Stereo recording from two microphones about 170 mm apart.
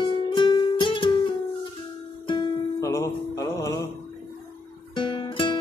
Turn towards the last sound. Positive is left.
turn(degrees=30)  # may be behind; listen again after turning